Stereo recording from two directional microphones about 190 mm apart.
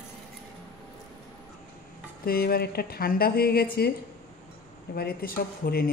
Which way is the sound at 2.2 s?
55° left (ahead or behind).